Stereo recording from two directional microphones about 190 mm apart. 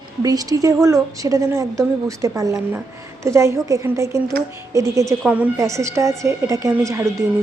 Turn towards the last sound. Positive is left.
turn(degrees=-15)  # may be behind; listen again after turning